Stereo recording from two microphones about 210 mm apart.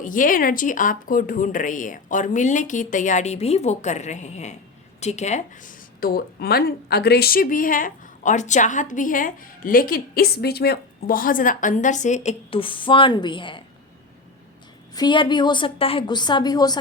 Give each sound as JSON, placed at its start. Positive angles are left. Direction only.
{"t": 0.0, "sound": "speech", "side_deg": 40}
{"t": 14.9, "sound": "a woman's voice", "side_deg": 20}